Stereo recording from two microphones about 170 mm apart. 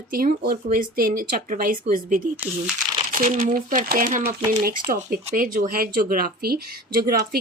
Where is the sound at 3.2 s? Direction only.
50° right (ahead or behind).